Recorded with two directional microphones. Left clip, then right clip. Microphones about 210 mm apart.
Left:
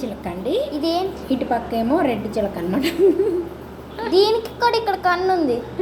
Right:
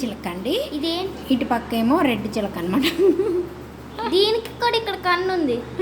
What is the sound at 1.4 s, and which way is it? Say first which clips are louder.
A woman's voice: left 3 dB; 35° right (ahead or behind).